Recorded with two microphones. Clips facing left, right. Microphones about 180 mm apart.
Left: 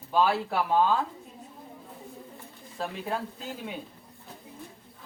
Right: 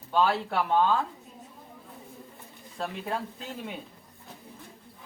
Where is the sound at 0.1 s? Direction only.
5° left (ahead or behind).